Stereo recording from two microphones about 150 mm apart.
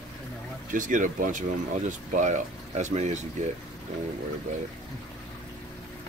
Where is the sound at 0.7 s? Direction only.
60° right (ahead or behind).